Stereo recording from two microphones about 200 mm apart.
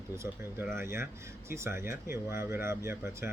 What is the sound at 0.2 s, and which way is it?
Speech, 10° right (ahead or behind).